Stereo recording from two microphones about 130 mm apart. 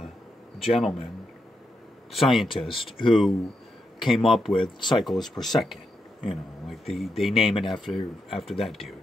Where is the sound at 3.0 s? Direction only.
Centre (ahead or behind).